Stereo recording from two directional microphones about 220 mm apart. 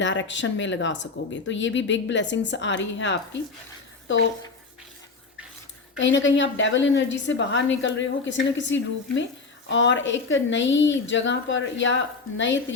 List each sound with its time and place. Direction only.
0.0 s speech: 55° left (ahead or behind)
6.0 s speech: 55° left (ahead or behind)